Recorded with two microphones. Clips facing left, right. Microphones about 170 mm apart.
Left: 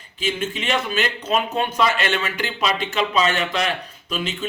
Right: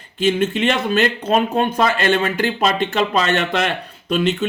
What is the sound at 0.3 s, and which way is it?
A man's voice, 55° right (ahead or behind).